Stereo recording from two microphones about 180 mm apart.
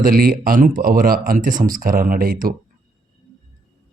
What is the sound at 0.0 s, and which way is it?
Speech, 55° right (ahead or behind).